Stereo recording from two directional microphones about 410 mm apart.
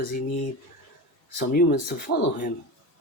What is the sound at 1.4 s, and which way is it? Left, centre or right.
Speech, left.